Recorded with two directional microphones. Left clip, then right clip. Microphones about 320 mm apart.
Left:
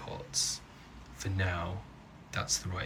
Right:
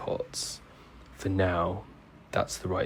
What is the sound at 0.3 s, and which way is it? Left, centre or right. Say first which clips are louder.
Speech: left 4 dB; centre.